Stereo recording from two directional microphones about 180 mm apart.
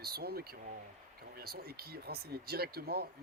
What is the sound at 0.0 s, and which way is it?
Speech, 60° right (ahead or behind).